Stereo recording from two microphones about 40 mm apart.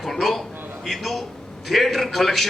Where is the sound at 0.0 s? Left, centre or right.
Centre.